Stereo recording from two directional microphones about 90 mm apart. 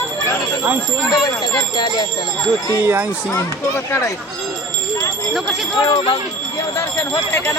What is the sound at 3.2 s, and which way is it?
Speech, 30° left (ahead or behind).